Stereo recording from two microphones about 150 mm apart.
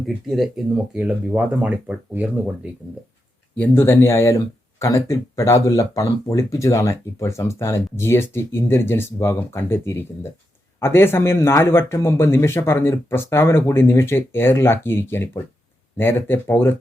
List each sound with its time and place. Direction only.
0.0 s speech: centre (ahead or behind)
3.5 s speech: 10° left (ahead or behind)